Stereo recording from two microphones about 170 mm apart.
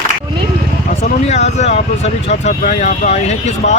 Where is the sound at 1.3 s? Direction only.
40° left (ahead or behind).